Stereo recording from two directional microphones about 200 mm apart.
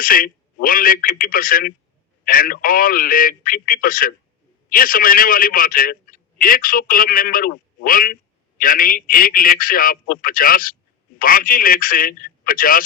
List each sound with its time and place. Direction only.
0.0 s a man's voice: 45° left (ahead or behind)